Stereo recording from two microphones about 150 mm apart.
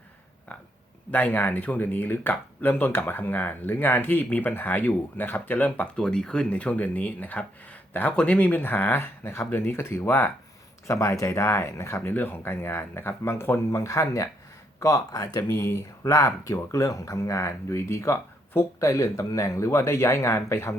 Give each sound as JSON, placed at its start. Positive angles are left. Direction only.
{"t": 1.1, "sound": "speech", "side_deg": 10}